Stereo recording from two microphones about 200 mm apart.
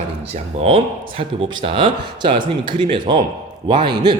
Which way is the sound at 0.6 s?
25° right (ahead or behind).